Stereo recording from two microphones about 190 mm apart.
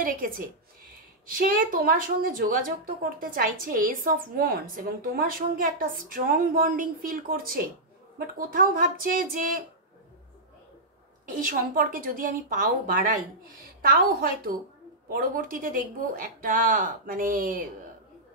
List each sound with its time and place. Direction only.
0.0 s a sound: 45° right (ahead or behind)
1.2 s a woman's voice: 45° right (ahead or behind)
11.2 s a woman's voice: 45° right (ahead or behind)